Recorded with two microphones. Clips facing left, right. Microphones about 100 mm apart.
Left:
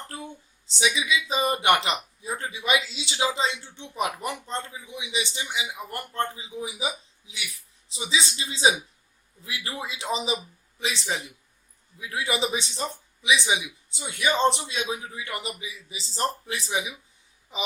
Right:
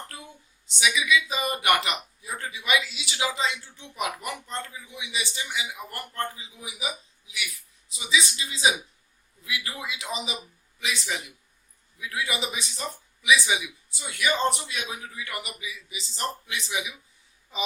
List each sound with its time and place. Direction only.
0.1 s a sound: 30° left (ahead or behind)
0.8 s a man's voice: 30° left (ahead or behind)
17.5 s a man's voice: 20° left (ahead or behind)